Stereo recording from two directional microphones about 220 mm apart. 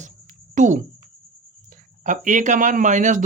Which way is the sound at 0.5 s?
35° right (ahead or behind).